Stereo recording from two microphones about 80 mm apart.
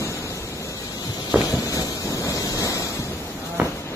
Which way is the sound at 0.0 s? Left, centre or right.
Left.